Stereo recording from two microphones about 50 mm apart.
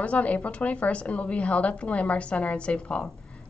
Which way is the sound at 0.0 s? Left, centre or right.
Left.